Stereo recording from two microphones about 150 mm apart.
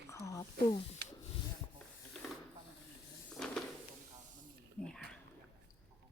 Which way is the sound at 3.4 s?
5° left (ahead or behind).